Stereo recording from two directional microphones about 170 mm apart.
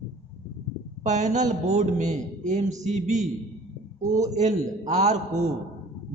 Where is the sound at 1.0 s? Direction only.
45° right (ahead or behind).